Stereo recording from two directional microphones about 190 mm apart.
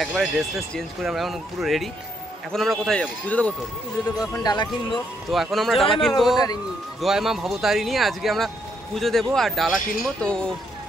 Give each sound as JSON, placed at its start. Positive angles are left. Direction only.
{"t": 0.0, "sound": "speech", "side_deg": 0}
{"t": 4.3, "sound": "speech", "side_deg": 20}
{"t": 4.9, "sound": "speech", "side_deg": 0}